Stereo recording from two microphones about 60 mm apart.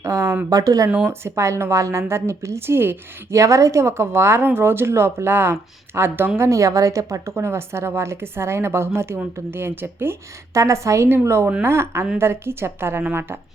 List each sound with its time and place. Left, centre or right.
0.0 s a sound: right
0.5 s speech: right
1.0 s speech: right
3.3 s speech: right
6.5 s a woman's voice: right
7.3 s speech: right
10.5 s speech: right